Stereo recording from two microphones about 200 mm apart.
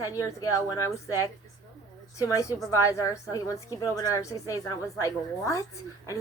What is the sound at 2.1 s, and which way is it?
A woman's voice, 15° left (ahead or behind).